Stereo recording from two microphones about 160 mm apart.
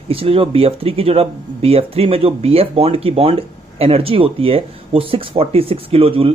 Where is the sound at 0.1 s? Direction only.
35° right (ahead or behind).